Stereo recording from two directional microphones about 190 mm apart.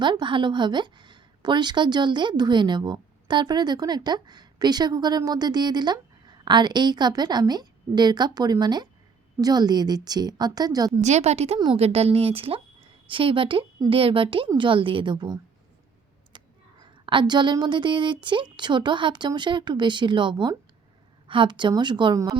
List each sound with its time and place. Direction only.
0.0 s a woman's voice: 25° right (ahead or behind)
11.0 s a woman's voice: 35° right (ahead or behind)
17.1 s a woman's voice: 25° right (ahead or behind)